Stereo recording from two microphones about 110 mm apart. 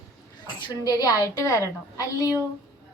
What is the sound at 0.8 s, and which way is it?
A woman's voice, 30° left (ahead or behind).